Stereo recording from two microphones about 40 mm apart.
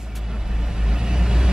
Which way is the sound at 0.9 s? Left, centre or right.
Centre.